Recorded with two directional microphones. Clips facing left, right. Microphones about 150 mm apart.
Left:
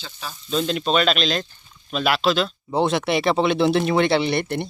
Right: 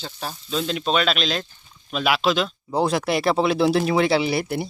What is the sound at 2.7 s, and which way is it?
Speech, centre (ahead or behind).